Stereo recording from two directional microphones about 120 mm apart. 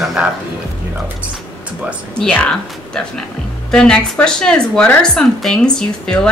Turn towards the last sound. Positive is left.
turn(degrees=5)  # may be behind; listen again after turning